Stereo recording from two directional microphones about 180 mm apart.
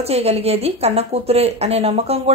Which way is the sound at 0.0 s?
35° right (ahead or behind).